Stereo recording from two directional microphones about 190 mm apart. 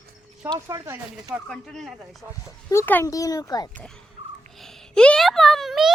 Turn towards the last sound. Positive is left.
turn(degrees=0)  # may be behind; listen again after turning